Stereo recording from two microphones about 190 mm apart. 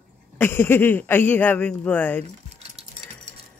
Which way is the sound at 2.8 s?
30° right (ahead or behind).